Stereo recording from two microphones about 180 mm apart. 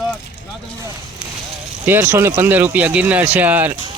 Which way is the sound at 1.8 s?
10° right (ahead or behind).